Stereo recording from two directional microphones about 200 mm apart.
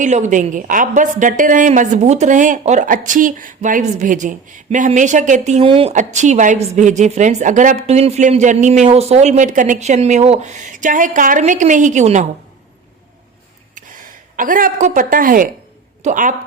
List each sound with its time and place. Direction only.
0.0 s a woman's voice: 40° right (ahead or behind)
13.7 s a woman's voice: 40° right (ahead or behind)